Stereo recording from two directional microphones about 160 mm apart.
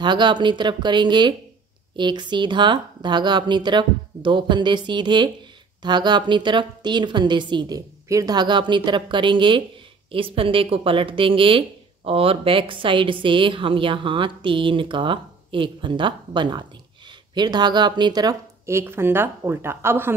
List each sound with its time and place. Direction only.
0.0 s a woman's voice: 30° right (ahead or behind)